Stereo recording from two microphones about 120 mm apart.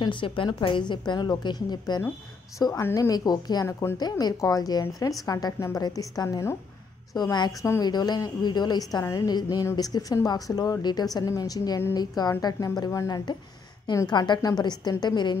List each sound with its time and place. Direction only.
0.0 s a woman's voice: 45° left (ahead or behind)